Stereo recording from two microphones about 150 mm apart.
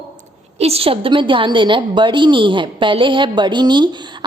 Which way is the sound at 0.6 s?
40° right (ahead or behind).